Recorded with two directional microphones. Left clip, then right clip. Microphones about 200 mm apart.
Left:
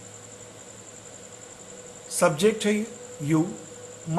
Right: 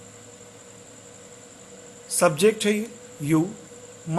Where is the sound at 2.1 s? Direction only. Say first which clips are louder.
Right 2 dB; 35° right (ahead or behind).